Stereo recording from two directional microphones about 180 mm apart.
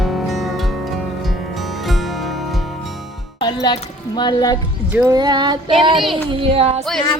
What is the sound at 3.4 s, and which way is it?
Music, 25° left (ahead or behind).